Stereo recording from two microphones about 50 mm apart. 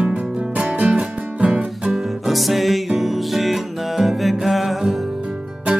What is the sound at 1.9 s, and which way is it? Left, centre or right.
Music, centre.